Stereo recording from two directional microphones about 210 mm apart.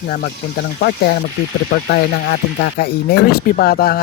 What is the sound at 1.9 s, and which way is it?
Speech, 50° left (ahead or behind).